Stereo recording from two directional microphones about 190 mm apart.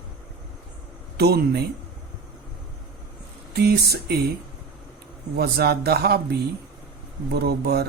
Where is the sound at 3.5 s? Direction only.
60° right (ahead or behind).